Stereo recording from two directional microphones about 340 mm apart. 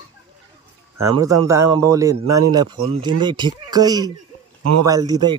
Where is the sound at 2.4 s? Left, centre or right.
Centre.